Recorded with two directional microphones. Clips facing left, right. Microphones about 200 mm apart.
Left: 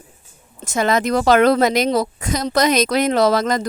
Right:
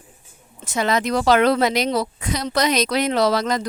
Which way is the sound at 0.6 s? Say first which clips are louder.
Left 3 dB; 45° left (ahead or behind).